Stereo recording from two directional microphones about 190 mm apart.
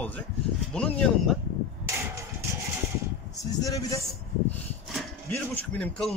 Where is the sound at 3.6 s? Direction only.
15° left (ahead or behind).